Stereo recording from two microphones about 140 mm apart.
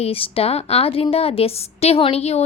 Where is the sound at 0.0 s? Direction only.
45° left (ahead or behind).